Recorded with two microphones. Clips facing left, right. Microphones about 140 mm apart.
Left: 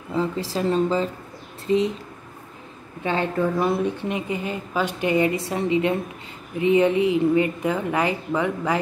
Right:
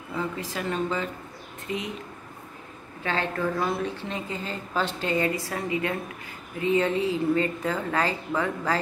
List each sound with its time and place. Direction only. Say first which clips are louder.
0.1 s a woman's voice: left 6 dB; 30° left (ahead or behind)
3.0 s speech: left 5 dB; 20° left (ahead or behind)